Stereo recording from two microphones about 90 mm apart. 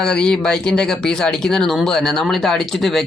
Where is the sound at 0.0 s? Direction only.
10° left (ahead or behind).